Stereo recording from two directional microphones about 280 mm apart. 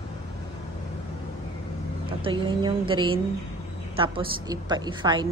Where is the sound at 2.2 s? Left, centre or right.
Centre.